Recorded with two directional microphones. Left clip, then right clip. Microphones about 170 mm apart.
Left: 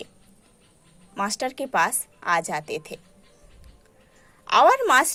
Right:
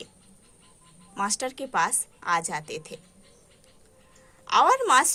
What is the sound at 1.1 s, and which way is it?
A woman's voice, 20° left (ahead or behind).